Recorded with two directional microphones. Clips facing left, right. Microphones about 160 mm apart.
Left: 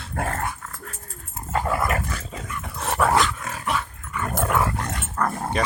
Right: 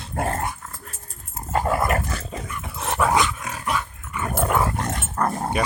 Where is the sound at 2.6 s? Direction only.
Centre (ahead or behind).